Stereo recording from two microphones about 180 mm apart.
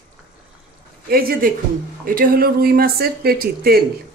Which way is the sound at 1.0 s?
55° right (ahead or behind).